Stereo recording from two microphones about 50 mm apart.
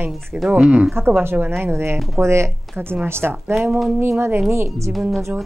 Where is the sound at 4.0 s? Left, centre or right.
Right.